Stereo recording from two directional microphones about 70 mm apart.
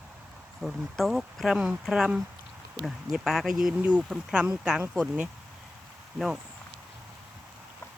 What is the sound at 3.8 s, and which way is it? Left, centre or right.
Speech, centre.